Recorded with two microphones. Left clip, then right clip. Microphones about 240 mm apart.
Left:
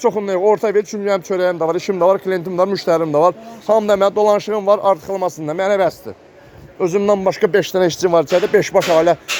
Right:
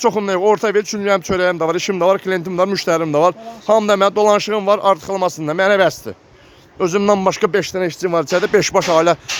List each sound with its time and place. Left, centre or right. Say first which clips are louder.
0.3 s a man's voice: even; centre
7.0 s speech: right 1 dB; right
7.3 s speech: left 1 dB; centre